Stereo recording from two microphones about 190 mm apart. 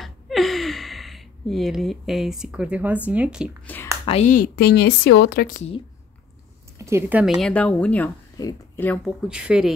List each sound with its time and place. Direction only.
0.0 s gasp: centre (ahead or behind)
3.1 s a woman's voice: 5° right (ahead or behind)
3.6 s a sound: 10° left (ahead or behind)
4.0 s speech: 35° left (ahead or behind); by 5.6 s 55° left (ahead or behind)
6.8 s a woman's voice: 15° right (ahead or behind); by 9.1 s 10° left (ahead or behind)
9.3 s a woman's voice: 5° right (ahead or behind)